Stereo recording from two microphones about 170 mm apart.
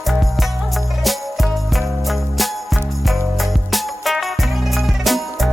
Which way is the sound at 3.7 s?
Centre (ahead or behind).